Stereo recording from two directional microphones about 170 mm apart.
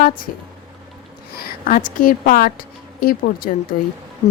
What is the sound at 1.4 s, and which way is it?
Speech, 55° left (ahead or behind).